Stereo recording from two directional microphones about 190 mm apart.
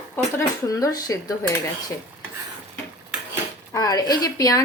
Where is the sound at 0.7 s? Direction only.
20° left (ahead or behind).